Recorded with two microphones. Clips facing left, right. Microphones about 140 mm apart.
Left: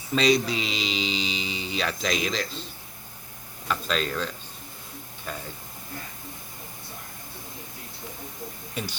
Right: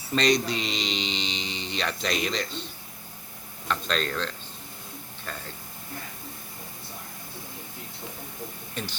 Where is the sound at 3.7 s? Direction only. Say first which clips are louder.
Left 1 dB; 5° left (ahead or behind).